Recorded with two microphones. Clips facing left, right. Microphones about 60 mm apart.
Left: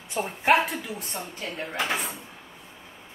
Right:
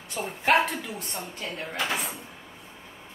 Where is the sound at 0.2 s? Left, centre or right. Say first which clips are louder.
Left 1 dB; centre.